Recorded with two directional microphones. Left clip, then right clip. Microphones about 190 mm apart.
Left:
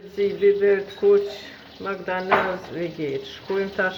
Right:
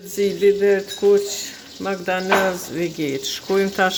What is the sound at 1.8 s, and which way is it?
Speech, 60° right (ahead or behind).